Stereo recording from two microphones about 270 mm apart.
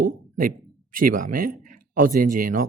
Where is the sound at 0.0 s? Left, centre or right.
Right.